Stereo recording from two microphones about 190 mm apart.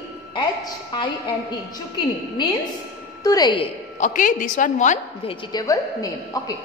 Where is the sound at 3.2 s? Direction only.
20° left (ahead or behind).